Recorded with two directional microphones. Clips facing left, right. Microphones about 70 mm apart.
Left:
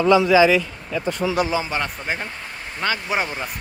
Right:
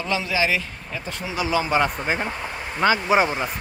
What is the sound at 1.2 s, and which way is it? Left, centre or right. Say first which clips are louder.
Speech: left 10 dB; left.